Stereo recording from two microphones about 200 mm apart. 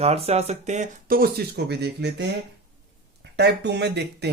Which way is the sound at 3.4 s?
60° right (ahead or behind).